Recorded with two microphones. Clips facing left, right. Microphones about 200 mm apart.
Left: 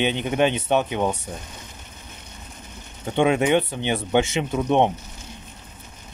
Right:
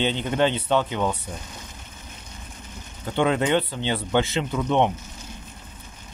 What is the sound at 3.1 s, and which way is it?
Speech, 20° left (ahead or behind).